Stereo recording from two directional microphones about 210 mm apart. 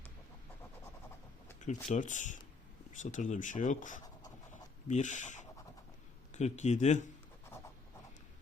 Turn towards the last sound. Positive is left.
turn(degrees=35)  # may be behind; listen again after turning